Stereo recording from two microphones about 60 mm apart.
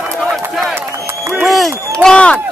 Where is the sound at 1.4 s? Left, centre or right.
Centre.